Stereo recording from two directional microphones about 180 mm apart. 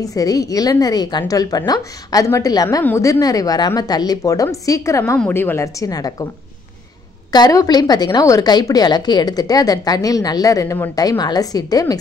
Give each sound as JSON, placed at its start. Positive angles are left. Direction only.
{"t": 0.0, "sound": "a woman's voice", "side_deg": 20}
{"t": 7.3, "sound": "a woman's voice", "side_deg": 20}